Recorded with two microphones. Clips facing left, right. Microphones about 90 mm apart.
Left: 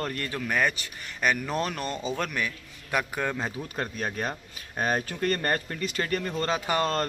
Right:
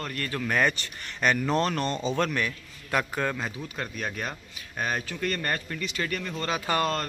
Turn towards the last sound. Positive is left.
turn(degrees=15)  # may be behind; listen again after turning